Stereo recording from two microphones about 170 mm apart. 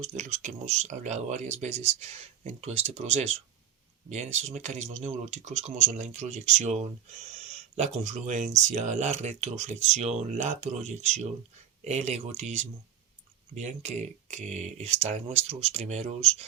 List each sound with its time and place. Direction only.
0.0 s speech: 40° right (ahead or behind)